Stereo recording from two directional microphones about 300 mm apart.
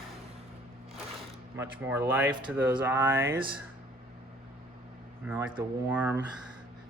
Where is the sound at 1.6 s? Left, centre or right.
Centre.